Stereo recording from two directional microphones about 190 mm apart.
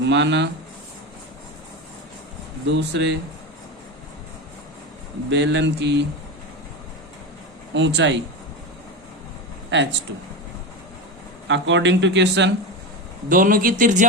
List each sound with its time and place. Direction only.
0.0 s speech: 70° right (ahead or behind)
2.6 s speech: 65° right (ahead or behind)
5.3 s speech: 65° right (ahead or behind)
7.7 s speech: 70° right (ahead or behind)
9.6 s speech: 70° right (ahead or behind)
11.4 s speech: 75° right (ahead or behind)
13.2 s speech: 45° right (ahead or behind)